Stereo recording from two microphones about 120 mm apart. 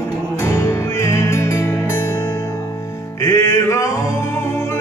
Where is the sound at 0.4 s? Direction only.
25° left (ahead or behind).